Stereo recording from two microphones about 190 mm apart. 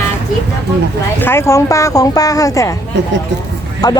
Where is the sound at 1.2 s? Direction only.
10° left (ahead or behind).